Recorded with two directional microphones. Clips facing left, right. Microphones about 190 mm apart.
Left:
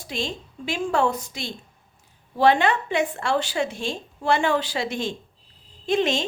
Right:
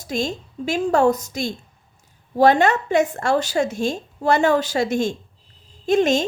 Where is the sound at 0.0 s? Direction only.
45° right (ahead or behind).